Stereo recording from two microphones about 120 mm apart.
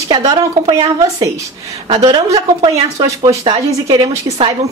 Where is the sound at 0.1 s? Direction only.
35° right (ahead or behind).